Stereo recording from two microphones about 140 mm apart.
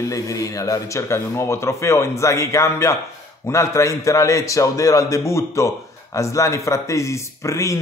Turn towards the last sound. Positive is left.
turn(degrees=20)  # may be behind; listen again after turning